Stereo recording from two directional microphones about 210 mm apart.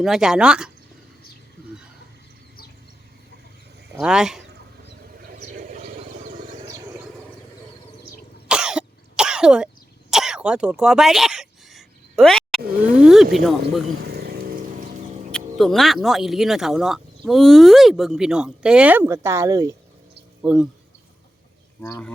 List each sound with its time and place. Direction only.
0.0 s speech: centre (ahead or behind)
3.9 s speech: 5° right (ahead or behind)
5.2 s vehicle: 40° right (ahead or behind)
6.6 s vehicle: 15° right (ahead or behind)
8.4 s throat clearing: 5° right (ahead or behind)
12.8 s speech: 5° right (ahead or behind)
14.0 s vehicle: 50° right (ahead or behind)
15.3 s speech: 5° left (ahead or behind); by 19.7 s 15° right (ahead or behind)
20.4 s speech: 5° right (ahead or behind)
21.8 s speech: 10° left (ahead or behind)